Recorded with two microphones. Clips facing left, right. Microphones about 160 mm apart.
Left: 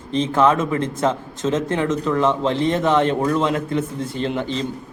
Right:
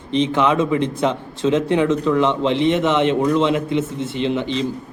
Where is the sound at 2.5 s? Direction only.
20° right (ahead or behind).